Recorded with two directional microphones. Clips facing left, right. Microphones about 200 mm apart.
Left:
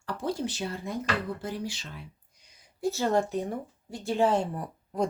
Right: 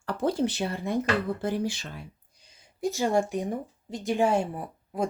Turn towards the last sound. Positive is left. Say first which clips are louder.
# even
turn(degrees=-5)  # may be behind; listen again after turning